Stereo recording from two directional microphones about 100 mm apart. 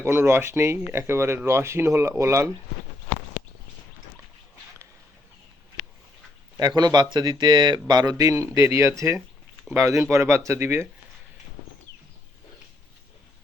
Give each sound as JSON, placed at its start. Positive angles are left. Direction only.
{"t": 0.0, "sound": "speech", "side_deg": -25}
{"t": 6.6, "sound": "a man's voice", "side_deg": -45}